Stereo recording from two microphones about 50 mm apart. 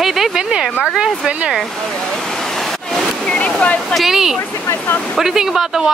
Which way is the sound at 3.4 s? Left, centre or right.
Left.